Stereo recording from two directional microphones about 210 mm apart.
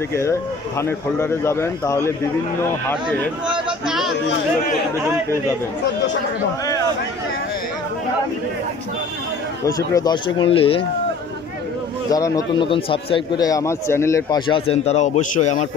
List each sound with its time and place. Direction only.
0.1 s speech: 15° left (ahead or behind)
3.4 s a sound: 5° right (ahead or behind)
9.7 s a man's voice: 20° left (ahead or behind)
12.1 s a man's voice: 15° left (ahead or behind); by 15.6 s 35° left (ahead or behind)